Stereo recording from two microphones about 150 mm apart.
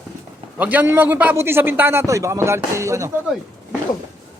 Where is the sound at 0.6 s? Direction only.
10° right (ahead or behind).